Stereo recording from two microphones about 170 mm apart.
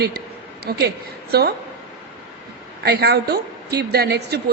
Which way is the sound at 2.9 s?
75° right (ahead or behind).